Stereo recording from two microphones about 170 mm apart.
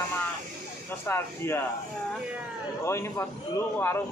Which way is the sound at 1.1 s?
15° left (ahead or behind).